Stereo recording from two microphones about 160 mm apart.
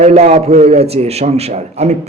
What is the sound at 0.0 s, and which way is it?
A man's voice, 45° right (ahead or behind).